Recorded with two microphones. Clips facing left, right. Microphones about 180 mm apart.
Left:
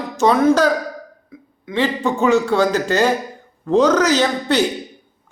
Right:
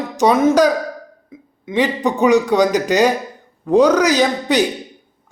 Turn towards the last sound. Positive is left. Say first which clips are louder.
# right 1 dB
turn(degrees=-15)  # may be behind; listen again after turning